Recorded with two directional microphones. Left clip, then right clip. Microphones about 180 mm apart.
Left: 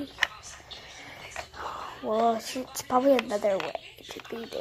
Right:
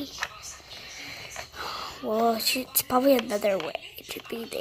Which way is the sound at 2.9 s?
20° right (ahead or behind).